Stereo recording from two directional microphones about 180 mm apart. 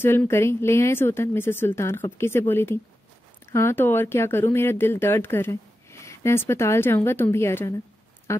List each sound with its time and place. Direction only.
0.0 s speech: 15° left (ahead or behind)